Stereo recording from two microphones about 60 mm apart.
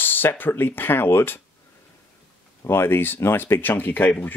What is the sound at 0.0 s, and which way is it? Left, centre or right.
Speech, left.